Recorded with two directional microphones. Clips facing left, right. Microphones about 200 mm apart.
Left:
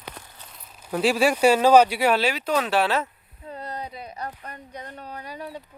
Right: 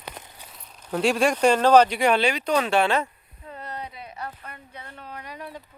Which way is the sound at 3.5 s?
35° left (ahead or behind).